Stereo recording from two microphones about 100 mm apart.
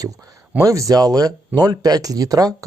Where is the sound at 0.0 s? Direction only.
35° right (ahead or behind).